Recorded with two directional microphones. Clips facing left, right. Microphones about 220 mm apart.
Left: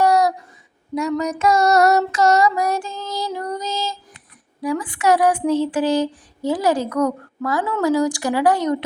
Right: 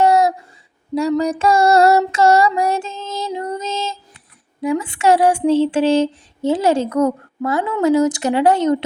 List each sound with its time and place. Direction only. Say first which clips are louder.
0.0 s a sound: right 2 dB; 25° right (ahead or behind)
0.9 s child singing: right 4 dB; 30° right (ahead or behind)
4.6 s speech: right 3 dB; 25° right (ahead or behind)